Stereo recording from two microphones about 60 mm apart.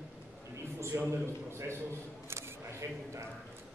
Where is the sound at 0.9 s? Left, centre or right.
Right.